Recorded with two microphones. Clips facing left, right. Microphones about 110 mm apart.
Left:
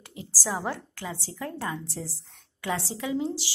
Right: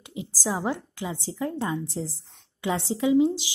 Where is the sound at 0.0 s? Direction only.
20° right (ahead or behind).